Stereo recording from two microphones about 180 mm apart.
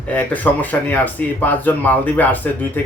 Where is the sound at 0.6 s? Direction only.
10° left (ahead or behind).